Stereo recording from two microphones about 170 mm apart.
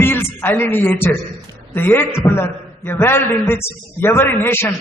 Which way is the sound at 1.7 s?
10° left (ahead or behind).